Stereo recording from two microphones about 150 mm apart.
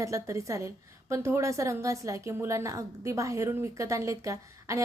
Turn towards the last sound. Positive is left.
turn(degrees=-20)  # may be behind; listen again after turning